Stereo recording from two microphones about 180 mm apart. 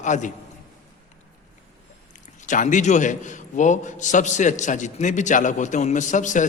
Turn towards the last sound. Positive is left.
turn(degrees=45)  # may be behind; listen again after turning